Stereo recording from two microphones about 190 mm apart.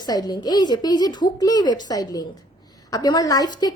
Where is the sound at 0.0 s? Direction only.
20° left (ahead or behind).